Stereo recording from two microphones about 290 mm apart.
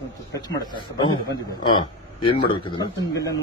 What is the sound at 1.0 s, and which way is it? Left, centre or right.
A man's voice, centre.